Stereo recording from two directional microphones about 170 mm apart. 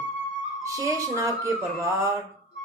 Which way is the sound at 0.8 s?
20° right (ahead or behind).